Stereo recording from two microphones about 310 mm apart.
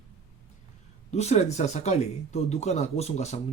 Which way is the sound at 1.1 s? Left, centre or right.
Left.